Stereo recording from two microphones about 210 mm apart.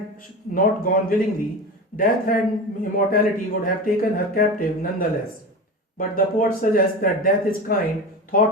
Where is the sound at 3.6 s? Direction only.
45° left (ahead or behind).